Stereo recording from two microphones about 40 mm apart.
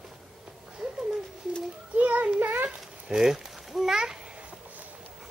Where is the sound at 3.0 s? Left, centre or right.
Centre.